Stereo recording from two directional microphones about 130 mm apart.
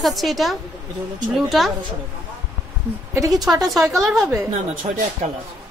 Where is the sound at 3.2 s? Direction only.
25° right (ahead or behind).